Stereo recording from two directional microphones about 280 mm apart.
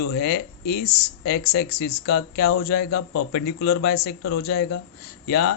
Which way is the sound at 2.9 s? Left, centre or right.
Left.